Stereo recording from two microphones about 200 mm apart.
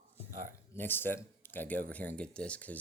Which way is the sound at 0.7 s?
10° left (ahead or behind).